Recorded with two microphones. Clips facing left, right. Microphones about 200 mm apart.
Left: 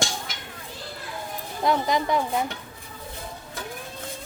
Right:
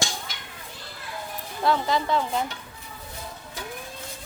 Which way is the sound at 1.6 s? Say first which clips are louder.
Left 1 dB; 15° left (ahead or behind).